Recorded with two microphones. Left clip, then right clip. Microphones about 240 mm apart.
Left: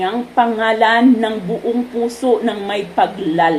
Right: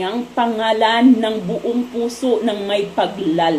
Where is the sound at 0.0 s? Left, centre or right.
Left.